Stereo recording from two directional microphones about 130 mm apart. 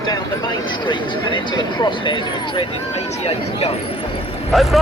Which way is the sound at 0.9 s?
35° left (ahead or behind).